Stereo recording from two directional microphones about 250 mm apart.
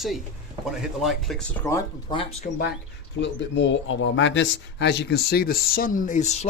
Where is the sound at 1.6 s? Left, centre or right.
Centre.